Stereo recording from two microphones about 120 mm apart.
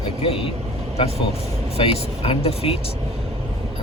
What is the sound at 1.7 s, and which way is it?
Speech, 55° left (ahead or behind).